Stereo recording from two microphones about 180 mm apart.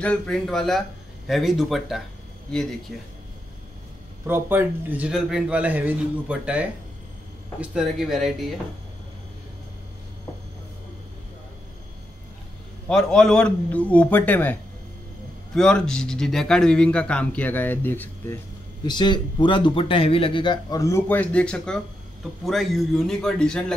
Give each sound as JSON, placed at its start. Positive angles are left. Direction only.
{"t": 0.0, "sound": "speech", "side_deg": 5}
{"t": 4.3, "sound": "speech", "side_deg": -10}
{"t": 12.8, "sound": "a man's voice", "side_deg": 5}
{"t": 18.9, "sound": "speech", "side_deg": 25}